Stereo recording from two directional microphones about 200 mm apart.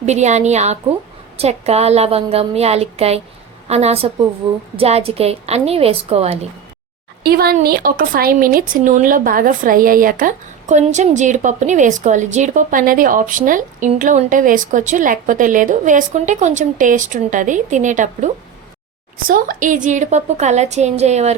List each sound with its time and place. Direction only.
0.0 s a woman's voice: 35° right (ahead or behind)
7.2 s a woman's voice: 50° right (ahead or behind); by 21.3 s 35° right (ahead or behind)